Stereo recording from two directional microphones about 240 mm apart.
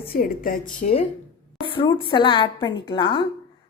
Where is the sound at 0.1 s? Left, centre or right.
Left.